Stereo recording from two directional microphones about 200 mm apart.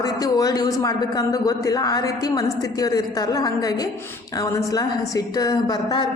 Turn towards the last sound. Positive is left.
turn(degrees=20)  # may be behind; listen again after turning